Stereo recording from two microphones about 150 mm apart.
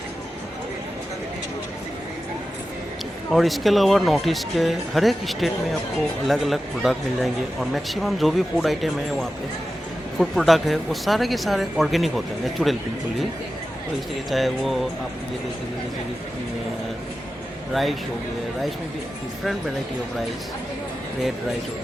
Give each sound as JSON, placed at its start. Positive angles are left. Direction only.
{"t": 3.3, "sound": "a man's voice", "side_deg": 0}
{"t": 14.3, "sound": "a man's voice", "side_deg": 0}